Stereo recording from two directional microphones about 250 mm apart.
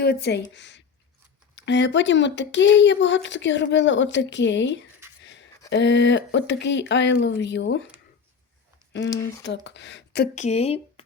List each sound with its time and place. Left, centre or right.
0.0 s speech: left
5.2 s a sound: left
5.7 s speech: left
9.4 s speech: left
10.3 s speech: left